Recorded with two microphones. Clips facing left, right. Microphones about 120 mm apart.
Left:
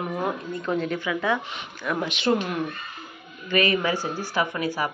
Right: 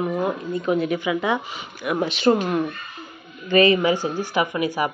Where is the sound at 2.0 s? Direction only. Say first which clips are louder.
Right 10 dB; 35° right (ahead or behind).